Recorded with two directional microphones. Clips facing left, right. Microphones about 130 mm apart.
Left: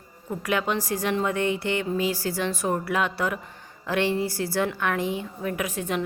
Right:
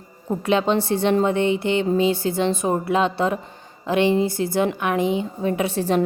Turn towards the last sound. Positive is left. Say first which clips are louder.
# right 7 dB
turn(degrees=-35)  # may be behind; listen again after turning